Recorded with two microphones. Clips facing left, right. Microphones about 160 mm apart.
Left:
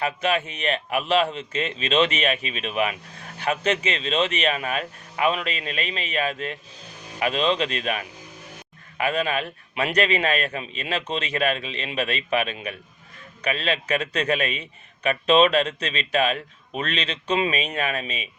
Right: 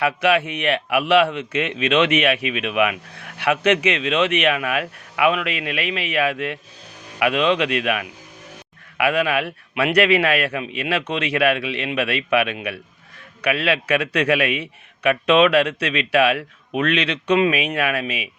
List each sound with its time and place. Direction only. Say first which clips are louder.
0.0 s a man's voice: right 5 dB; 70° right (ahead or behind)